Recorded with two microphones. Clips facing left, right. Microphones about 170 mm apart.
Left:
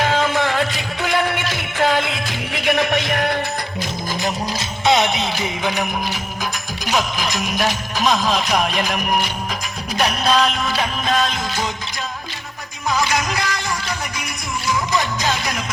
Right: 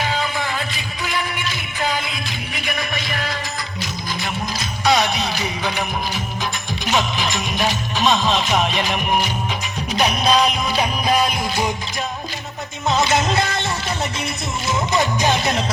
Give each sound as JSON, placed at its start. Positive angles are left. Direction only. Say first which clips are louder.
{"t": 0.0, "sound": "music", "louder": "left 5 dB", "side_deg": 70}
{"t": 4.9, "sound": "music", "louder": "left 1 dB", "side_deg": 20}
{"t": 6.9, "sound": "music", "louder": "even", "side_deg": 0}
{"t": 12.9, "sound": "music", "louder": "right 2 dB", "side_deg": -25}